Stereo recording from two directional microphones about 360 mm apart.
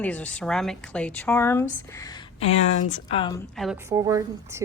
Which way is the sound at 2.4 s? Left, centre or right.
Centre.